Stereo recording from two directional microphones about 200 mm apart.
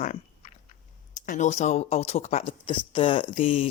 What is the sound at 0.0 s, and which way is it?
Biting, 40° left (ahead or behind).